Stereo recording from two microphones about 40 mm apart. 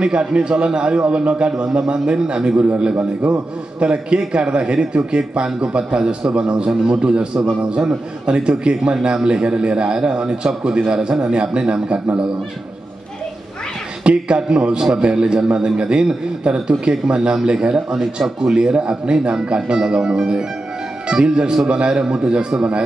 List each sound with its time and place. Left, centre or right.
0.0 s a man's voice: right
3.0 s a man's voice: right
14.0 s a man's voice: right